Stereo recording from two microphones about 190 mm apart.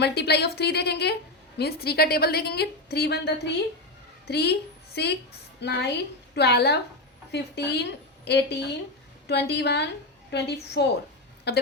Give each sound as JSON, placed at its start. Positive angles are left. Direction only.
{"t": 0.0, "sound": "a woman's voice", "side_deg": 60}